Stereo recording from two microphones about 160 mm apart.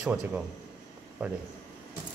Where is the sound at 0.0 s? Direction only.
10° right (ahead or behind).